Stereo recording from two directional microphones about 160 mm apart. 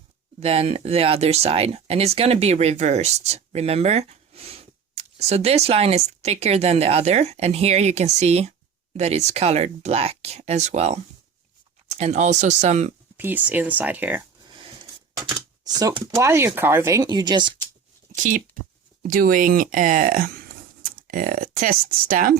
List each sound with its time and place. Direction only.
0.3 s speech: 40° right (ahead or behind)
13.1 s speech: 10° right (ahead or behind)
15.6 s speech: 25° right (ahead or behind)
18.2 s speech: 55° right (ahead or behind)